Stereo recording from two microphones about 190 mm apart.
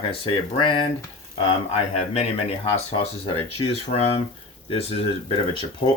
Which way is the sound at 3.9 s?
30° left (ahead or behind).